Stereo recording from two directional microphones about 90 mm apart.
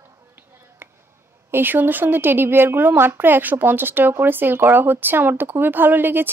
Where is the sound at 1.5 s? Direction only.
20° right (ahead or behind).